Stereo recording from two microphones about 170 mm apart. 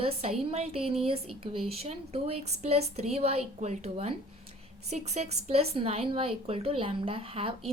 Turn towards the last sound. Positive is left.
turn(degrees=-35)  # may be behind; listen again after turning